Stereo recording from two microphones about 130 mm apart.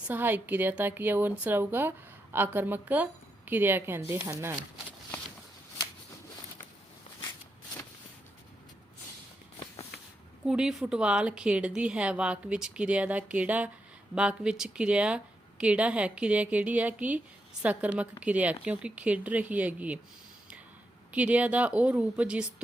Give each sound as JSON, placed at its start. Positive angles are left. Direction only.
{"t": 0.1, "sound": "a woman's voice", "side_deg": -15}
{"t": 10.4, "sound": "a woman's voice", "side_deg": -5}
{"t": 21.1, "sound": "a woman's voice", "side_deg": -10}